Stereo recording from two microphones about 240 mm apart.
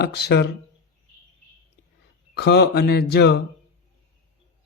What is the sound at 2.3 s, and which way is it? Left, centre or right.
A man's voice, left.